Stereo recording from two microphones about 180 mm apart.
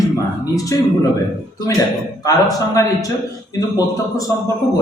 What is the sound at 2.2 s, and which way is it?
A woman's voice, 20° left (ahead or behind).